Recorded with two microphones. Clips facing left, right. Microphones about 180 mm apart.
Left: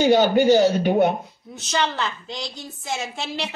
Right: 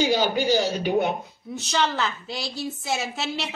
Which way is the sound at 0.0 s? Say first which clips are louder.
Left 6 dB; 50° left (ahead or behind).